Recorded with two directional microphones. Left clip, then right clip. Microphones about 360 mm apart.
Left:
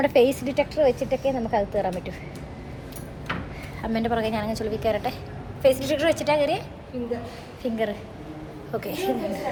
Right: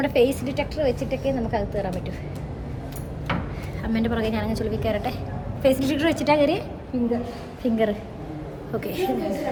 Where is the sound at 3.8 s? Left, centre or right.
Centre.